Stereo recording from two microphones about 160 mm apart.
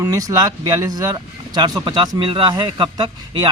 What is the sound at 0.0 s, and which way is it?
A man's voice, 20° right (ahead or behind).